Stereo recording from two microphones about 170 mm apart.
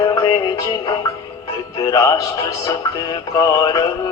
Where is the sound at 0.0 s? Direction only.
25° left (ahead or behind).